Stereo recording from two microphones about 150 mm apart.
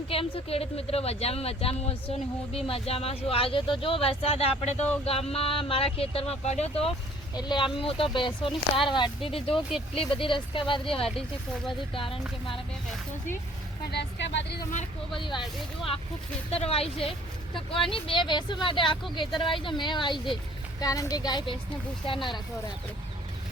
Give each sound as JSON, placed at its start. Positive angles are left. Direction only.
{"t": 0.1, "sound": "a woman's voice", "side_deg": 40}
{"t": 7.3, "sound": "a woman's voice", "side_deg": 30}
{"t": 15.1, "sound": "a woman's voice", "side_deg": 30}
{"t": 16.5, "sound": "a woman's voice", "side_deg": 40}